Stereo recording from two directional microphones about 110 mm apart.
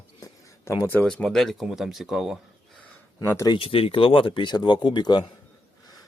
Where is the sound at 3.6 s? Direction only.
60° left (ahead or behind); by 5.2 s 40° left (ahead or behind).